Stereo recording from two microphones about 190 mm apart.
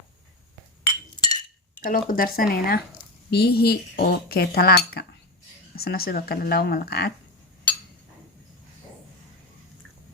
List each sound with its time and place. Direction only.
0.9 s chink: 20° left (ahead or behind)
1.9 s speech: 50° left (ahead or behind)